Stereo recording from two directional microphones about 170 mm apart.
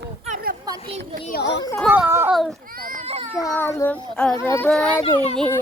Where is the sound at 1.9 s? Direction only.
15° right (ahead or behind).